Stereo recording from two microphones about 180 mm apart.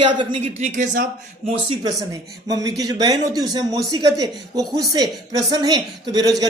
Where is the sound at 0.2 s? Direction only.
30° right (ahead or behind).